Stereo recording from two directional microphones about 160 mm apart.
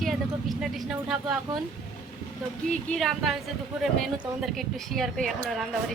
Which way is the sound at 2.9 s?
Centre (ahead or behind).